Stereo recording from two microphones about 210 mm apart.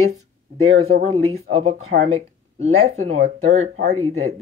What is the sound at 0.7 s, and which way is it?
Speech, 80° right.